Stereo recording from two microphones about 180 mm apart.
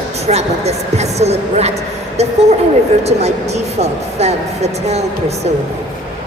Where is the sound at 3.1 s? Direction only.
35° right (ahead or behind).